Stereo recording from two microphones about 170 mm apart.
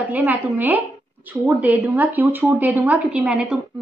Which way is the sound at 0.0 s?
10° right (ahead or behind).